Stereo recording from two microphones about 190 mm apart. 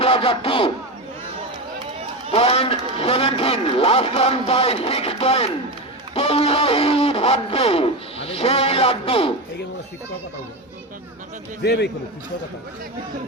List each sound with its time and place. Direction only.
0.0 s speech: 30° left (ahead or behind)
2.3 s a man's voice: 30° left (ahead or behind)
6.1 s music: 30° left (ahead or behind)
11.6 s a man's voice: 60° left (ahead or behind)